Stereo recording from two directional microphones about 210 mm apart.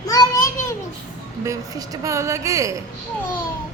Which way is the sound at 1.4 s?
15° right (ahead or behind).